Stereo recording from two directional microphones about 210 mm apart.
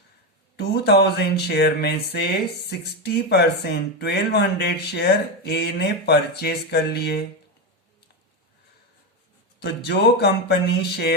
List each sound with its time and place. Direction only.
0.5 s a sound: 50° left (ahead or behind)
2.6 s speech: 50° left (ahead or behind)
9.6 s speech: 55° left (ahead or behind)